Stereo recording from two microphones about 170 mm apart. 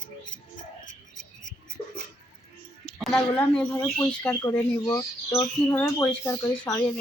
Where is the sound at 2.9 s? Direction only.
5° left (ahead or behind).